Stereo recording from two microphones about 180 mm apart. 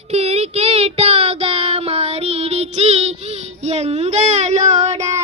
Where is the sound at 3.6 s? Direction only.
35° right (ahead or behind).